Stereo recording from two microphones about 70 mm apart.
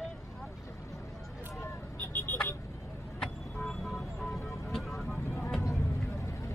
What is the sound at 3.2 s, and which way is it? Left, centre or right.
Vehicle, centre.